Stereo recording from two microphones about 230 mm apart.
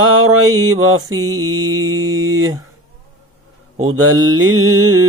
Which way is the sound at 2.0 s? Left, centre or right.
Centre.